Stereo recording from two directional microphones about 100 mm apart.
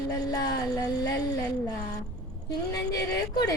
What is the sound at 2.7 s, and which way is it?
Music, 35° left (ahead or behind).